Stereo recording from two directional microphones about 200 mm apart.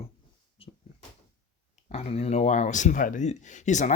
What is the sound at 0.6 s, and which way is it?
Cupboard open or close, 30° left (ahead or behind).